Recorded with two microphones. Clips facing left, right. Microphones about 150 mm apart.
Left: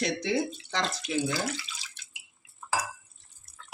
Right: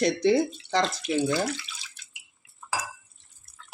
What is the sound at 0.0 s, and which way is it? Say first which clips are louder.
Speech: right 7 dB; 40° right (ahead or behind).